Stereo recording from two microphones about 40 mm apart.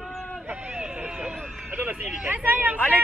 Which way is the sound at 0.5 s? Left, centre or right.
Right.